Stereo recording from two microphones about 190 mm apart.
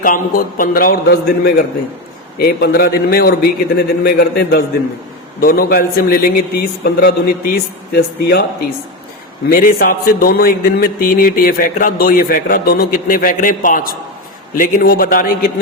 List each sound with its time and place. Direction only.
0.0 s a man's voice: 45° left (ahead or behind)
9.5 s a man's voice: 50° left (ahead or behind)